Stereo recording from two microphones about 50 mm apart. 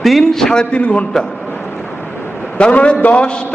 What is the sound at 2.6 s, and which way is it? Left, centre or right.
Speech, left.